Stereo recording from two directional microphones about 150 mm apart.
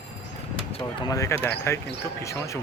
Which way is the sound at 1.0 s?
20° left (ahead or behind).